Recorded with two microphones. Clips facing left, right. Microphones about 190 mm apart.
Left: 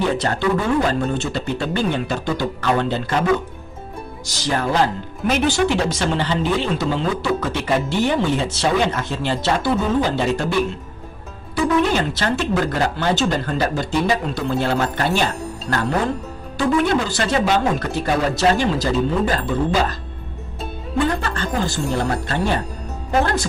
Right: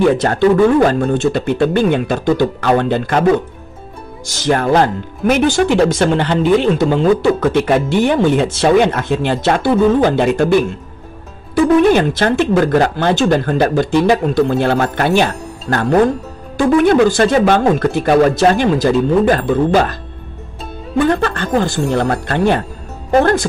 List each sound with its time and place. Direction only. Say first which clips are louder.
0.2 s speech: right 9 dB; 50° right (ahead or behind)
4.5 s speech: right 6 dB; 55° right (ahead or behind)
11.5 s speech: right 8 dB; 55° right (ahead or behind)
21.1 s speech: right 8 dB; 60° right (ahead or behind)